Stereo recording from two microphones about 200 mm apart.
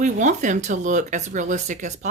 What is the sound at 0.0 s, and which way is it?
A woman's voice, 40° right (ahead or behind).